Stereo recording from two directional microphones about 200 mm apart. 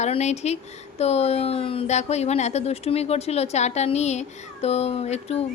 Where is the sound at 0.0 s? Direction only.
35° left (ahead or behind).